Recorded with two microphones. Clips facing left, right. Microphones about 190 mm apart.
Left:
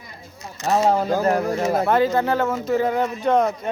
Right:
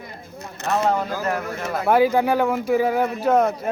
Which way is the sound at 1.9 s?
10° right (ahead or behind).